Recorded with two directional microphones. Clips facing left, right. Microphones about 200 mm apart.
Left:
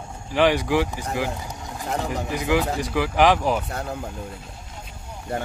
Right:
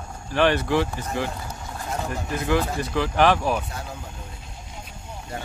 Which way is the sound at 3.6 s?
60° left (ahead or behind).